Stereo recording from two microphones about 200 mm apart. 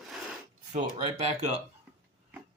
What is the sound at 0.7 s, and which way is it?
Speech, 35° right (ahead or behind).